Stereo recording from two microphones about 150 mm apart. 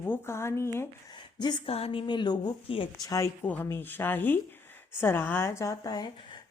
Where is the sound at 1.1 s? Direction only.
30° left (ahead or behind).